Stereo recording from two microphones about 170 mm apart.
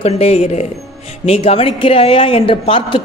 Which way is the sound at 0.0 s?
35° left (ahead or behind).